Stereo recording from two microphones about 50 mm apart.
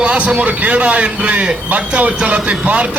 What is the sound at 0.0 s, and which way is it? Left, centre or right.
A man's voice, right.